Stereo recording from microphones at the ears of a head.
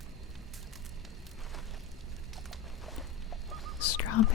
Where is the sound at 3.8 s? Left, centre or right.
Left.